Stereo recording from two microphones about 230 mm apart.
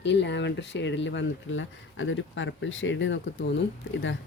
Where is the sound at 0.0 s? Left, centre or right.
Left.